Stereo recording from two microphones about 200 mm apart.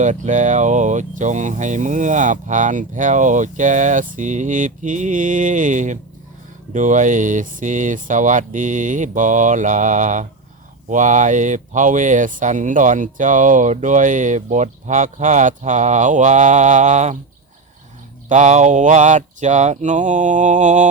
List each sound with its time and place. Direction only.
0.0 s speech: 40° right (ahead or behind)
18.3 s speech: 35° right (ahead or behind)